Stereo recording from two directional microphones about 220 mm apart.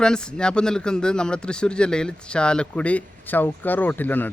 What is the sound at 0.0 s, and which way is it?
Speech, 5° left (ahead or behind).